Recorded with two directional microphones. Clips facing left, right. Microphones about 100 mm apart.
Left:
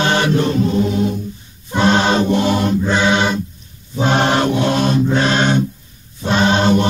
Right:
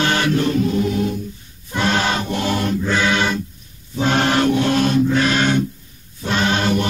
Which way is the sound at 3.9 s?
20° left (ahead or behind).